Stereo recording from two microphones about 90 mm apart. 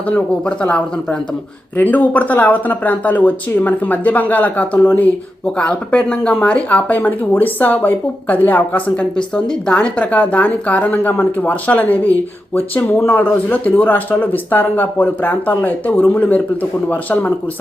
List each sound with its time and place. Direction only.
0.1 s speech: 15° left (ahead or behind)